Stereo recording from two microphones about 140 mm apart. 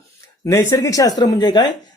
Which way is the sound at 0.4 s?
20° left (ahead or behind).